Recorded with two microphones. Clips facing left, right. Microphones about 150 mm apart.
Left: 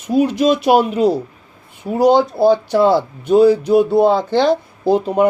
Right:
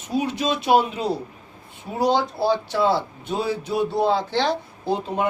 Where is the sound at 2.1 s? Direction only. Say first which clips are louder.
Left 9 dB; 50° left (ahead or behind).